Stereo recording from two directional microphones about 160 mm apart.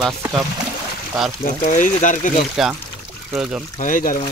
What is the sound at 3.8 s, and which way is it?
Speech, 55° left (ahead or behind).